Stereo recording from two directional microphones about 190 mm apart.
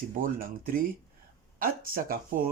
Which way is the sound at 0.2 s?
50° right (ahead or behind).